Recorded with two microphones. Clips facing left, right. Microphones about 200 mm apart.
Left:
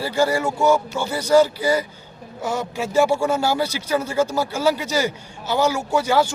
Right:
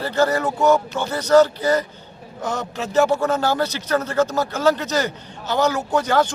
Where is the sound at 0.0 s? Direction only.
10° left (ahead or behind).